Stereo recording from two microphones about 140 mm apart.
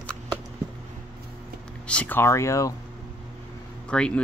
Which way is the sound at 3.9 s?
5° left (ahead or behind).